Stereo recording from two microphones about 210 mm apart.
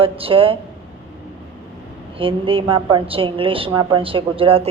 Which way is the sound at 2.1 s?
25° right (ahead or behind).